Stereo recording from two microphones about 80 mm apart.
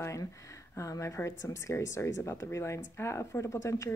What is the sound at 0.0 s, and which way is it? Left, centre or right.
Speech, left.